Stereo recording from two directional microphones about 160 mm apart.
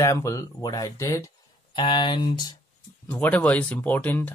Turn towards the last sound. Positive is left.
turn(degrees=10)  # may be behind; listen again after turning